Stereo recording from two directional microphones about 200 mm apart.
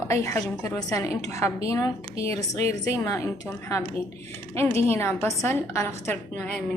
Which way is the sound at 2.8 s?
15° left (ahead or behind).